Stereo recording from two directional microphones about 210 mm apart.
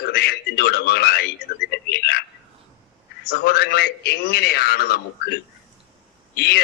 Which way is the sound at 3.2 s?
50° left (ahead or behind).